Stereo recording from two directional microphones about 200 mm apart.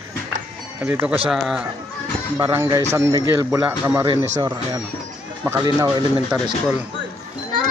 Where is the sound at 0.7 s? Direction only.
10° right (ahead or behind).